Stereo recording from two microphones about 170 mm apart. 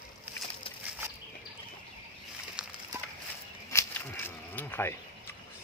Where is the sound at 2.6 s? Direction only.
5° right (ahead or behind).